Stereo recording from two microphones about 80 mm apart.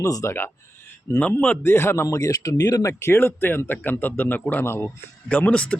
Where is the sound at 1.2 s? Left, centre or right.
Left.